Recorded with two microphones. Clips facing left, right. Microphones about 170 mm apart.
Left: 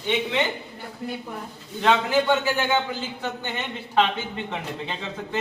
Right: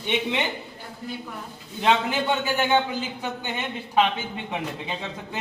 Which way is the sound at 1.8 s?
20° right (ahead or behind).